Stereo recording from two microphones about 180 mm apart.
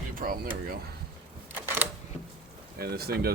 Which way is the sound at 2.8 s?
60° right (ahead or behind).